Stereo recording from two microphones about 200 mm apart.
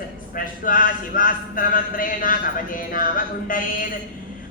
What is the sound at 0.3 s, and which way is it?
A man's voice, 45° left (ahead or behind).